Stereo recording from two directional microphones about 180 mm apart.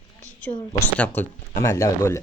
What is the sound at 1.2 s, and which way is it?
Speech, 10° left (ahead or behind).